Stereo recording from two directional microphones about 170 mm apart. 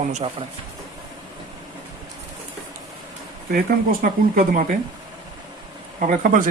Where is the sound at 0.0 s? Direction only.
45° right (ahead or behind).